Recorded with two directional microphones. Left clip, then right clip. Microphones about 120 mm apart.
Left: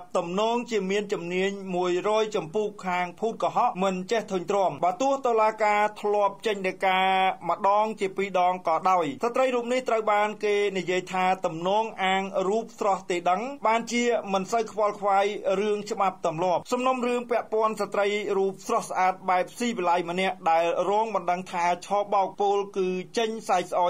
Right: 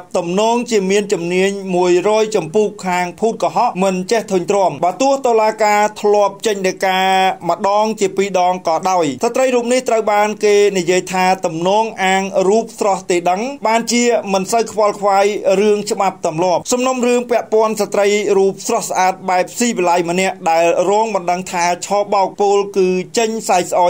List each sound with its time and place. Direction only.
0.1 s speech: 15° right (ahead or behind)